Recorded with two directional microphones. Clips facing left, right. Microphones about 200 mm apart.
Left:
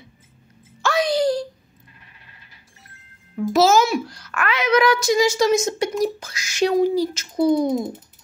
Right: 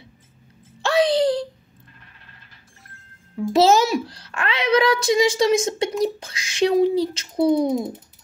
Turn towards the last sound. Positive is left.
turn(degrees=0)  # may be behind; listen again after turning